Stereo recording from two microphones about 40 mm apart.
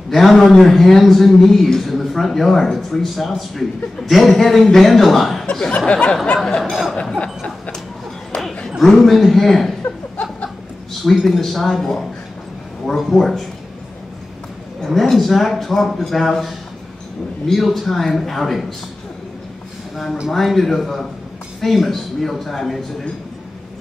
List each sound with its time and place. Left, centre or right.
0.1 s speech: centre
5.9 s a sound: left
6.6 s speech: centre
7.0 s a sound: left
8.8 s speech: centre
10.9 s speech: centre
15.0 s speech: centre
20.2 s speech: centre